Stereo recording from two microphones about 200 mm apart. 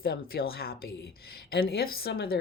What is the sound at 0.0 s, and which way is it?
Speech, 50° left (ahead or behind).